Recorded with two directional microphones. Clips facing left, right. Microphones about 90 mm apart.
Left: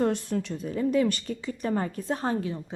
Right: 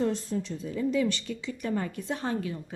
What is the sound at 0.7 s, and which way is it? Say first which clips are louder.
A woman's voice: left 3 dB; 50° left (ahead or behind).